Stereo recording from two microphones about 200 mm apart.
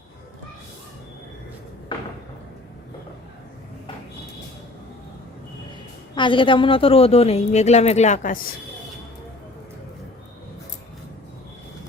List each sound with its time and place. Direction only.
6.1 s speech: 25° left (ahead or behind); by 8.4 s 40° left (ahead or behind)